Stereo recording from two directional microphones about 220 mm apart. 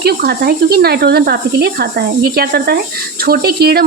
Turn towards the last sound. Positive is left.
turn(degrees=-45)  # may be behind; listen again after turning